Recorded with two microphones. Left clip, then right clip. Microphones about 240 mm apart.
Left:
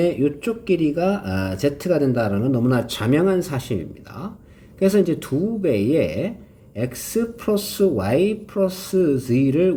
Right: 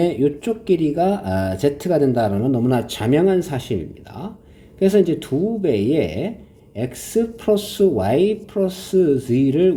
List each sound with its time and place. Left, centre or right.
0.1 s speech: centre
1.0 s speech: right
1.3 s speech: centre
1.5 s speech: right
2.3 s speech: centre
4.8 s speech: centre